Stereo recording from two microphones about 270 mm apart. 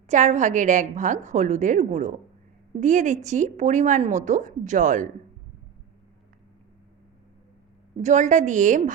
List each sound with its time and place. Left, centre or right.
0.1 s a woman's voice: right
8.0 s a woman's voice: right